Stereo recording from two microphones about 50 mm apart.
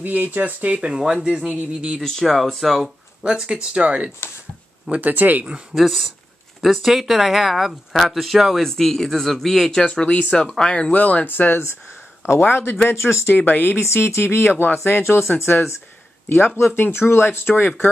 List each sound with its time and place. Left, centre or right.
0.0 s speech: right
2.0 s speech: centre
3.3 s speech: centre
4.9 s speech: right
5.7 s speech: centre
10.9 s speech: left
11.2 s speech: left
12.9 s speech: left
13.3 s speech: left
13.7 s speech: left
16.7 s speech: left